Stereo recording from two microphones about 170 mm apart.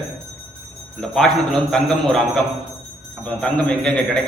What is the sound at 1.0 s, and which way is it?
A man's voice, 5° left (ahead or behind).